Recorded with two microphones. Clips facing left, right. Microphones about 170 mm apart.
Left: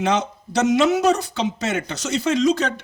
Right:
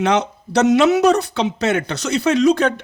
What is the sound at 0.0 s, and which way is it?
Speech, 65° right (ahead or behind).